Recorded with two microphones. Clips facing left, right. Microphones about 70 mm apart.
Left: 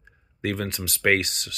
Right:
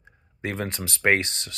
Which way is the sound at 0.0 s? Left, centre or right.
Right.